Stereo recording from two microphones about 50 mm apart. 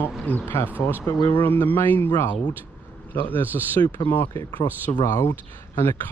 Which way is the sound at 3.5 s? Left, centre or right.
Left.